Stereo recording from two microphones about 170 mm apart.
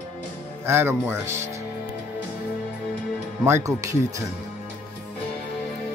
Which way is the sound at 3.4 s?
15° right (ahead or behind).